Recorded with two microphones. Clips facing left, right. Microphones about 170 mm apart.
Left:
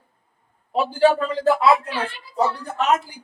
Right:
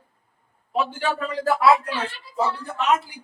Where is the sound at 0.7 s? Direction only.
35° left (ahead or behind).